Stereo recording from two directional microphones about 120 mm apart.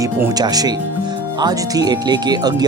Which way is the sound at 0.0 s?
30° right (ahead or behind).